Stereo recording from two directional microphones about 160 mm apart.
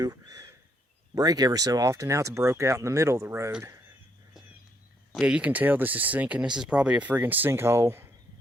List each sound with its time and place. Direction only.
0.0 s speech: 25° right (ahead or behind)
5.1 s speech: 5° right (ahead or behind)